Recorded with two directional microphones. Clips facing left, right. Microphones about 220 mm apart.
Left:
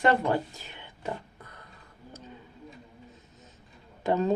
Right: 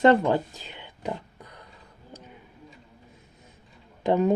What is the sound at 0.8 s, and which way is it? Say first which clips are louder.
Pig: right 3 dB; 15° right (ahead or behind).